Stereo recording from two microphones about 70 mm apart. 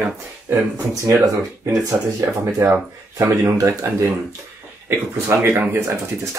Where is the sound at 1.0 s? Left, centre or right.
Right.